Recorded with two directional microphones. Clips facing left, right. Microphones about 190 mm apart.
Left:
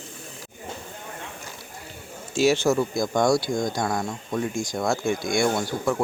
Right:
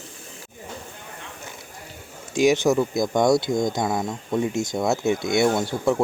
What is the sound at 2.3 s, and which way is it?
Speech, 15° right (ahead or behind).